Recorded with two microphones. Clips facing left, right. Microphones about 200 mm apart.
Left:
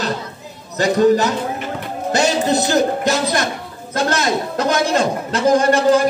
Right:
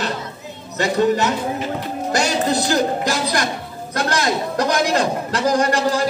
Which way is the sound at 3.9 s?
25° left (ahead or behind).